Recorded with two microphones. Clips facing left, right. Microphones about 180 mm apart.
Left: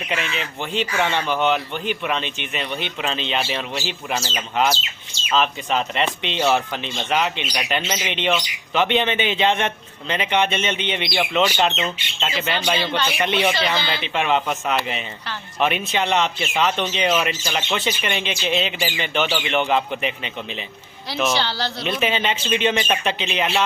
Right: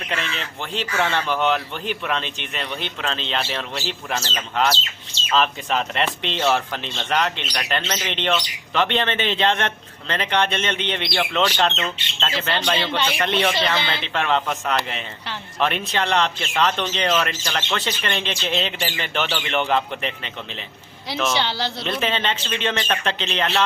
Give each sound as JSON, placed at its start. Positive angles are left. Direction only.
{"t": 0.1, "sound": "speech", "side_deg": 5}
{"t": 21.3, "sound": "speech", "side_deg": -20}
{"t": 21.8, "sound": "speech", "side_deg": 5}